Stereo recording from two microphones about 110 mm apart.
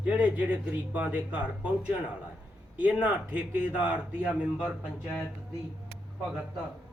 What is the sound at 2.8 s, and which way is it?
Speech, 10° right (ahead or behind).